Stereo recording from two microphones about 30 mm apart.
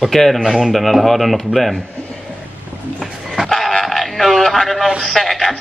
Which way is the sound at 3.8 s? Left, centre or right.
Centre.